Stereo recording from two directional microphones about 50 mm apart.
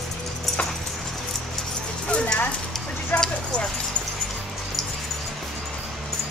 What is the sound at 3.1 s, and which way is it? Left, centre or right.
Speech, left.